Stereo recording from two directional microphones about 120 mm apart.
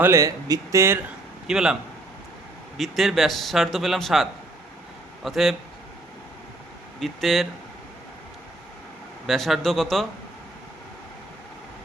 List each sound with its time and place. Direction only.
0.0 s speech: 20° right (ahead or behind)
1.5 s a man's voice: 5° right (ahead or behind)
7.0 s a man's voice: centre (ahead or behind)
9.2 s a man's voice: centre (ahead or behind)